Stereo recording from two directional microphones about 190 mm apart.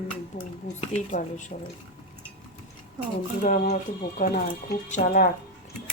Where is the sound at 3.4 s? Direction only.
40° left (ahead or behind).